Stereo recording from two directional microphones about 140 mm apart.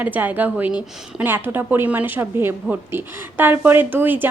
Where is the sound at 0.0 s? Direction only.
10° right (ahead or behind).